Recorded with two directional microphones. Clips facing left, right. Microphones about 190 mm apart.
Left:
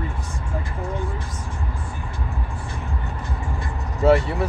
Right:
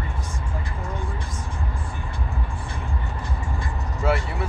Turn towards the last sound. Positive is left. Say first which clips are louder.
# left 7 dB
turn(degrees=40)  # may be behind; listen again after turning